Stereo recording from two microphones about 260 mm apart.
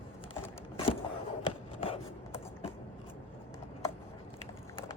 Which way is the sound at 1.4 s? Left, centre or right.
Left.